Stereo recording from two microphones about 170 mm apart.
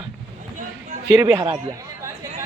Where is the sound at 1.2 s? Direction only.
15° right (ahead or behind).